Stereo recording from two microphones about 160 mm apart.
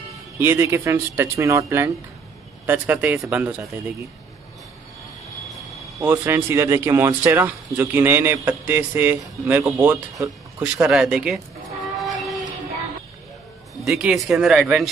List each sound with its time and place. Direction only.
0.4 s speech: 15° right (ahead or behind)
5.9 s speech: 20° right (ahead or behind)
10.6 s a sound: 5° right (ahead or behind)
13.8 s speech: 5° right (ahead or behind)